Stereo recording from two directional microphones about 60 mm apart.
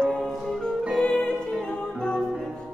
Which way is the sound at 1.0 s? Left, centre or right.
Centre.